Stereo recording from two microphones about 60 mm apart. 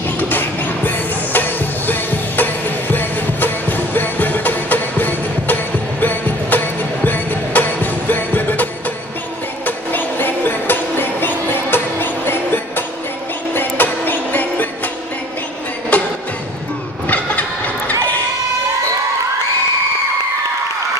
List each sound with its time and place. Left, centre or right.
0.2 s music: left
9.7 s music: left
15.9 s music: left
17.1 s a sound: left